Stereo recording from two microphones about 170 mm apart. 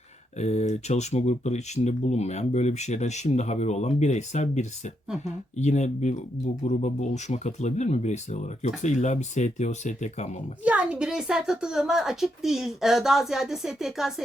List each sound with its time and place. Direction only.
0.3 s speech: 40° left (ahead or behind)
10.6 s a woman's voice: 10° right (ahead or behind)